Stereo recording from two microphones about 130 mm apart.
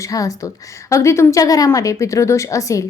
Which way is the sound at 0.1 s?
25° left (ahead or behind).